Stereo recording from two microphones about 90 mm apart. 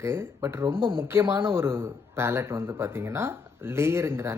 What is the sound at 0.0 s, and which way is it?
A man's voice, 30° right (ahead or behind).